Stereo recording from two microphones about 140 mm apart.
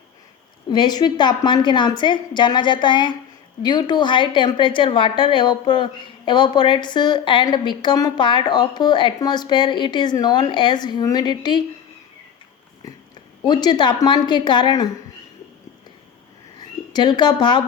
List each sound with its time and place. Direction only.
0.7 s a woman's voice: 30° left (ahead or behind)
13.4 s a woman's voice: 30° left (ahead or behind)
16.6 s speech: 30° left (ahead or behind)